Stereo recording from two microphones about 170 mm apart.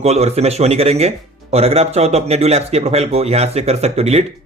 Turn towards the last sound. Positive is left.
turn(degrees=-40)  # may be behind; listen again after turning